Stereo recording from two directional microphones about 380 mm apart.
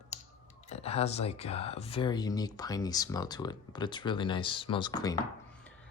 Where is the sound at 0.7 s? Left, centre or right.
Centre.